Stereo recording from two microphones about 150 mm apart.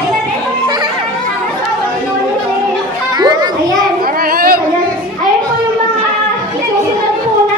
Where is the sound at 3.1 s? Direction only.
25° right (ahead or behind).